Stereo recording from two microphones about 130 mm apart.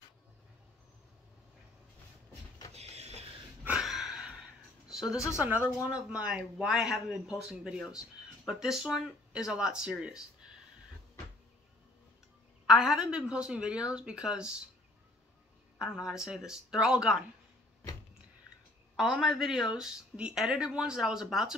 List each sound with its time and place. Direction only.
2.7 s a sound: 55° right (ahead or behind)
3.6 s a sound: 5° right (ahead or behind)
5.9 s a man's voice: 10° right (ahead or behind)
12.6 s a woman's voice: 5° right (ahead or behind)
15.8 s a man's voice: 5° right (ahead or behind)
18.9 s a man's voice: centre (ahead or behind)